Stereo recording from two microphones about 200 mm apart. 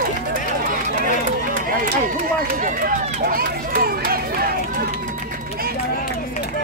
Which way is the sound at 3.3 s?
50° right (ahead or behind).